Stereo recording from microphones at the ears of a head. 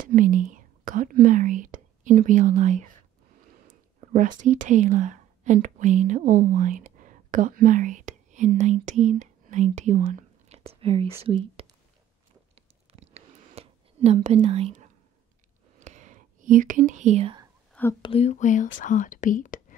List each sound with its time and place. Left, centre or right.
0.0 s speech: right
12.9 s whispering: right
18.1 s speech: left